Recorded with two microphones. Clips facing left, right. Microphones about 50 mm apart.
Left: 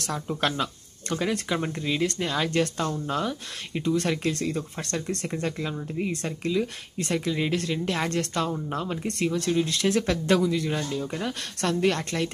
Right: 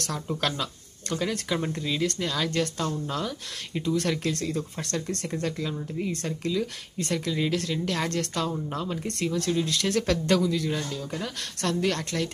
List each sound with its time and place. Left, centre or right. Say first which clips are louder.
0.0 s speech: left 2 dB; centre